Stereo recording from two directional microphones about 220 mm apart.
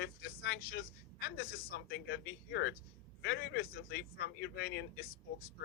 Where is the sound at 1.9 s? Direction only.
50° left (ahead or behind).